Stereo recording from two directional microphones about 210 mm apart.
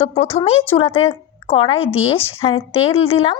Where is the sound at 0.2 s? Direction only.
30° left (ahead or behind).